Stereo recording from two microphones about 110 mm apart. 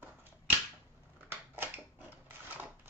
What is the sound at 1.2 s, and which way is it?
Typewriter, 20° right (ahead or behind).